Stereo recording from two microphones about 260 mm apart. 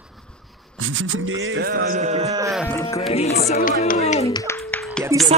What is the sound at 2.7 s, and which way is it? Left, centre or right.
Speech, centre.